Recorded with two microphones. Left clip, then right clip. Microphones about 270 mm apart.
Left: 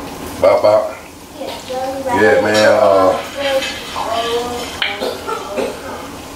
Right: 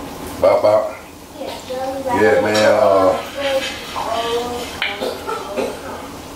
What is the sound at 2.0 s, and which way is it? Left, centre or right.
Speech, centre.